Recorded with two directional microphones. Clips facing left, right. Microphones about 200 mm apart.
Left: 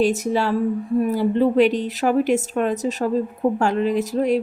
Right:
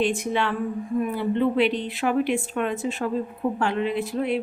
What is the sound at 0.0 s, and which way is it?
A woman's voice, 40° left (ahead or behind).